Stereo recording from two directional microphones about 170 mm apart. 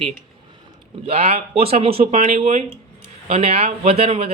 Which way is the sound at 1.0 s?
35° right (ahead or behind).